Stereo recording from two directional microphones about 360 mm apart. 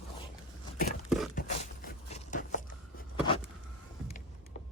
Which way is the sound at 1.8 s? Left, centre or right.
Left.